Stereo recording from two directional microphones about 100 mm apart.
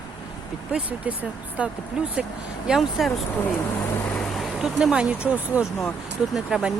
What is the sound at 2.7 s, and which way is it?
Speech, centre (ahead or behind).